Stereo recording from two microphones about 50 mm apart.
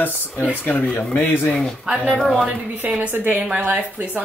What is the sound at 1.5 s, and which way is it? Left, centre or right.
Speech, centre.